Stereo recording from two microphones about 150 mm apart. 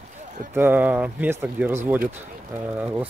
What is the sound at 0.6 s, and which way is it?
Speech, 10° right (ahead or behind).